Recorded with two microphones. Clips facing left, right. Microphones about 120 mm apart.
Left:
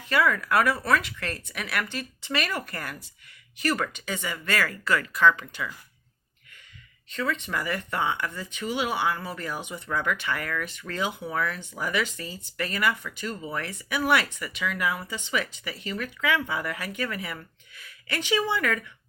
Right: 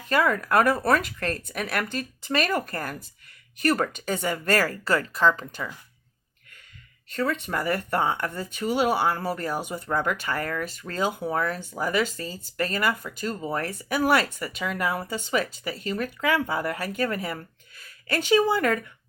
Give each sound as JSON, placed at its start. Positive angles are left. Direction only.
{"t": 0.0, "sound": "speech", "side_deg": -40}
{"t": 7.1, "sound": "speech", "side_deg": -45}